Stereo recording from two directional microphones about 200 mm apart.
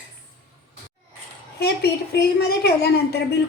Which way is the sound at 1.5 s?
55° left (ahead or behind).